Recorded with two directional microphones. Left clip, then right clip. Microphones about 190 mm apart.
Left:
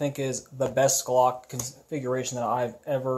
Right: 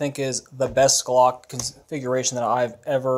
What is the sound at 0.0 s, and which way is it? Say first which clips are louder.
Speech: right 4 dB; 25° right (ahead or behind).